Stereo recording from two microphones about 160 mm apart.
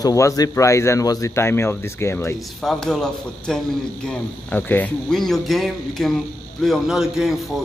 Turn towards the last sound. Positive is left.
turn(degrees=0)  # may be behind; listen again after turning